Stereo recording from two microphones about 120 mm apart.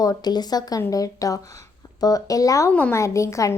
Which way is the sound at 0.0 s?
35° left (ahead or behind).